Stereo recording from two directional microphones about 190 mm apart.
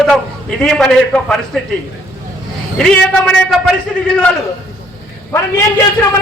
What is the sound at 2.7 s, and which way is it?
A man's voice, 5° left (ahead or behind).